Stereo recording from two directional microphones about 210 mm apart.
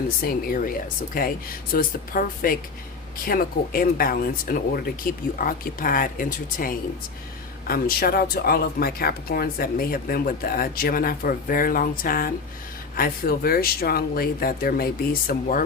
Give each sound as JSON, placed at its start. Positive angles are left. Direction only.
{"t": 0.2, "sound": "speech", "side_deg": 45}